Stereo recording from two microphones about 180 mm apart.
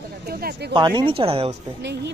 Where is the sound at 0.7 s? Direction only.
25° right (ahead or behind).